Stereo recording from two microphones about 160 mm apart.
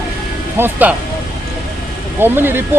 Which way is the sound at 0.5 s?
10° right (ahead or behind).